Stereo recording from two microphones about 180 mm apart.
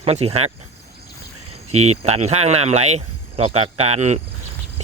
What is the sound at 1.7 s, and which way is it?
Speech, 40° right (ahead or behind).